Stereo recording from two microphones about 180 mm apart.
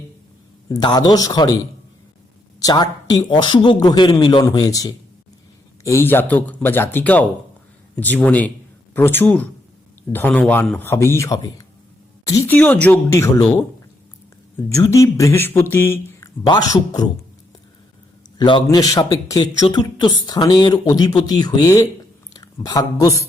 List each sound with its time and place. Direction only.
0.7 s a man's voice: 25° left (ahead or behind)
18.3 s speech: 25° left (ahead or behind)